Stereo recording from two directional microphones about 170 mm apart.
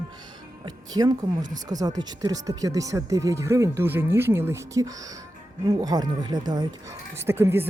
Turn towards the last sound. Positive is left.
turn(degrees=-15)  # may be behind; listen again after turning